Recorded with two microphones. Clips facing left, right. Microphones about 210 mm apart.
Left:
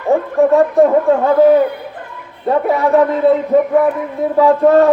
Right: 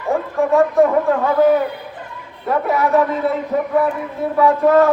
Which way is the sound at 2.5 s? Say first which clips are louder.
Left 4 dB; 30° left (ahead or behind).